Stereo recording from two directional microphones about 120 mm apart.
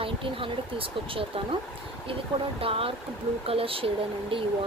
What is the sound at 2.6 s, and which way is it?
Speech, 50° right (ahead or behind).